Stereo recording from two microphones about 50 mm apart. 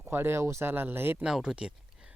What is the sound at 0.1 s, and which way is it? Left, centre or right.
Speech, right.